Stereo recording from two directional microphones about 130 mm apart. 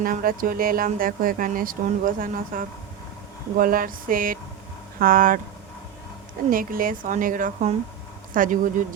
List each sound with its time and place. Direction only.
0.0 s speech: 90° right
6.5 s speech: 90° right